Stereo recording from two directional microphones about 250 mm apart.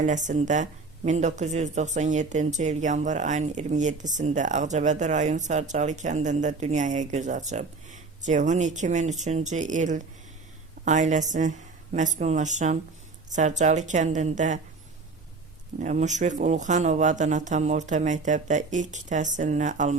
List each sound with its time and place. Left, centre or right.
0.0 s speech: right
15.8 s speech: right